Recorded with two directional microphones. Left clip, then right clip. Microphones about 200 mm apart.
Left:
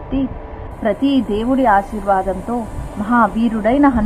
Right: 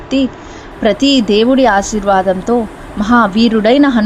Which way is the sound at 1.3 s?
40° right (ahead or behind).